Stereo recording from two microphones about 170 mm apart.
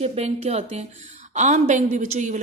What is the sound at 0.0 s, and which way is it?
A woman's voice, 40° right (ahead or behind).